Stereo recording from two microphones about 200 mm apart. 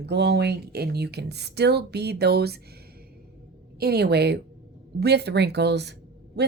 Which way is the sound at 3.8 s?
55° right (ahead or behind).